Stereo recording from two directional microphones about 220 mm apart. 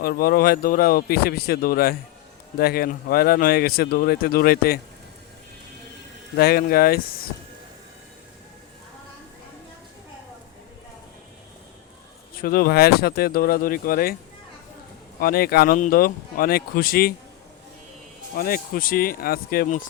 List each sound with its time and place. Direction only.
0.0 s speech: 45° left (ahead or behind)
6.3 s speech: 45° left (ahead or behind)
12.4 s speech: 40° left (ahead or behind)
15.2 s speech: 45° left (ahead or behind)
18.3 s speech: 40° left (ahead or behind)